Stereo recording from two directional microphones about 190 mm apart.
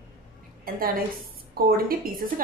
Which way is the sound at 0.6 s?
50° right (ahead or behind).